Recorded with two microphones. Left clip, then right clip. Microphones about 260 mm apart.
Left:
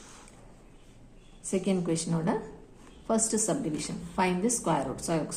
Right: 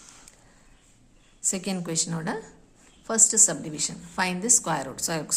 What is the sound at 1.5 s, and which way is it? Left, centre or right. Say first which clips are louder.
A woman's voice: left 1 dB; right.